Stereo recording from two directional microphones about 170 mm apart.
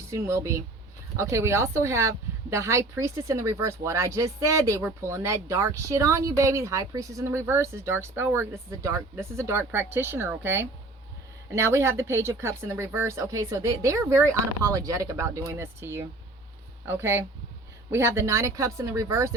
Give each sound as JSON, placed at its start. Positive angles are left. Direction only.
{"t": 0.1, "sound": "speech", "side_deg": -15}